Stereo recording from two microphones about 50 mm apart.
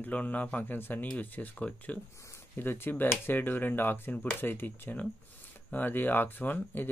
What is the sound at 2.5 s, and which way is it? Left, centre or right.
Speech, left.